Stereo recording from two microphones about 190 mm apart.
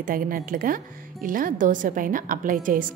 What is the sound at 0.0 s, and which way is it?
A woman's voice, 45° right (ahead or behind).